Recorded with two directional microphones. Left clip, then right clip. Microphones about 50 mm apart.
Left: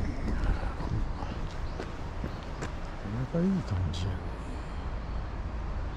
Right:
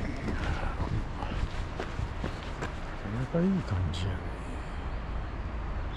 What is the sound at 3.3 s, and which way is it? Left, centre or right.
Vehicle, centre.